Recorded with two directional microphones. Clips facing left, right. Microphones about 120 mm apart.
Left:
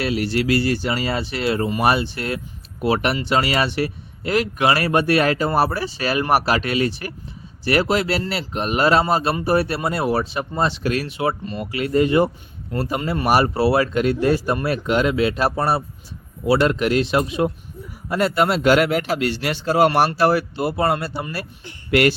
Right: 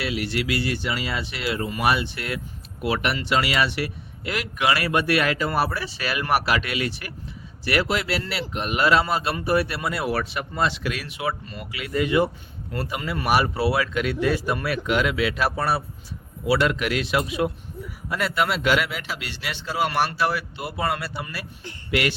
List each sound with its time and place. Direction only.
0.0 s a man's voice: 40° left (ahead or behind)
13.0 s speech: 25° left (ahead or behind)
13.2 s a man's voice: 40° left (ahead or behind)
21.8 s speech: 50° left (ahead or behind)